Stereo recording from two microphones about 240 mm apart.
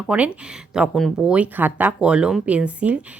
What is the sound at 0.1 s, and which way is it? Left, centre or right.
Speech, centre.